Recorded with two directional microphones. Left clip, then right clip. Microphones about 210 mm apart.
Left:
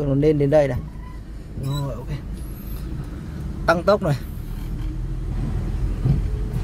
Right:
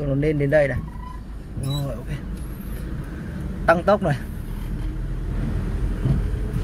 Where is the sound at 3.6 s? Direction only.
20° left (ahead or behind).